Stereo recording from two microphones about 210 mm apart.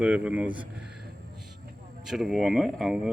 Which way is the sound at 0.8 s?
5° right (ahead or behind).